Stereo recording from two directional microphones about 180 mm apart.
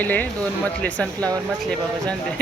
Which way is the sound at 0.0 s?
10° left (ahead or behind).